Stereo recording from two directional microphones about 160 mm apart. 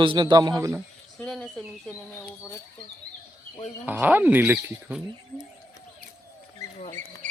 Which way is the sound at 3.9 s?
10° right (ahead or behind).